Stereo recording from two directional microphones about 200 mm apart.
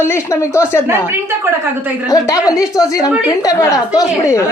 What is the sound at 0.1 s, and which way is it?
Speech, 15° left (ahead or behind).